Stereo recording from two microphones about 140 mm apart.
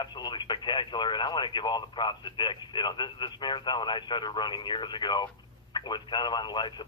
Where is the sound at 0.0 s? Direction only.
30° left (ahead or behind).